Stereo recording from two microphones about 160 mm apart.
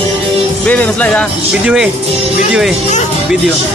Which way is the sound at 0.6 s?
10° left (ahead or behind).